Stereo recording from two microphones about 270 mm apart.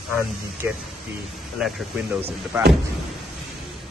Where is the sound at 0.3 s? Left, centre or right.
Centre.